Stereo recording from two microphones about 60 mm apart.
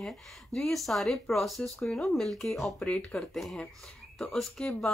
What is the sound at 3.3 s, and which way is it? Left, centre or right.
Speech, centre.